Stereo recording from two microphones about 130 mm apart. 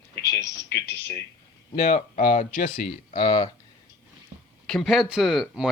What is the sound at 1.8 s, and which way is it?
Speech, 70° left (ahead or behind).